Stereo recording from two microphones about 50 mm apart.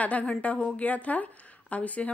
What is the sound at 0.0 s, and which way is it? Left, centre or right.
A woman's voice, left.